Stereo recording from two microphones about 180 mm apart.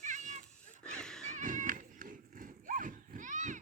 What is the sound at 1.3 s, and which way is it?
Cat, 45° right (ahead or behind).